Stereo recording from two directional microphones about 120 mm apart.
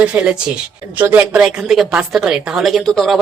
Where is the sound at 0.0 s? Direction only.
10° right (ahead or behind).